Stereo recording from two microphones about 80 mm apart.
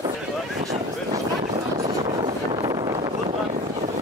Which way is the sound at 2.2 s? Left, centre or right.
Right.